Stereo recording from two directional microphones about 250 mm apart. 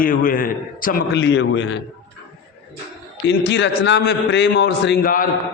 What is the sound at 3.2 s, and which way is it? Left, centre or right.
A man's voice, left.